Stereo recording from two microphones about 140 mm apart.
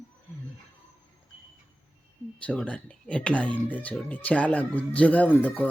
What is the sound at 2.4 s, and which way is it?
Speech, 10° left (ahead or behind).